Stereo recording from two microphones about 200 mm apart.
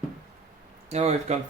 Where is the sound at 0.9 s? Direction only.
35° right (ahead or behind).